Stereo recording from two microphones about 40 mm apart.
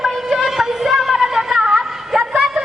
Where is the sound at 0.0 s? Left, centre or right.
Centre.